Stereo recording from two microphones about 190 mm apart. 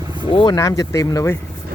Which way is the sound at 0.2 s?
25° left (ahead or behind).